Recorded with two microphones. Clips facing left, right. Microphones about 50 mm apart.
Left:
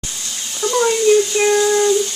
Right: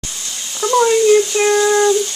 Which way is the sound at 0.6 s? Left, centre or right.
Centre.